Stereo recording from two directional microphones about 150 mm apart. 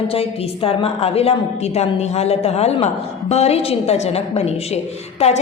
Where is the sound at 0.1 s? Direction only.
40° left (ahead or behind).